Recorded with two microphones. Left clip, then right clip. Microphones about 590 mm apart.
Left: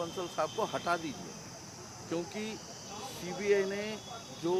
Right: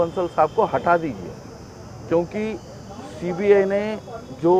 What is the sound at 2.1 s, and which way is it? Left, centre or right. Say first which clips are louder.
Speech: right 16 dB; right.